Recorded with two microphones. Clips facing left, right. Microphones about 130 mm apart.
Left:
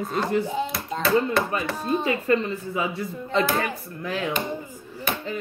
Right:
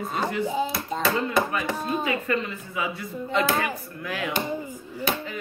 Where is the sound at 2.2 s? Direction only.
35° left (ahead or behind).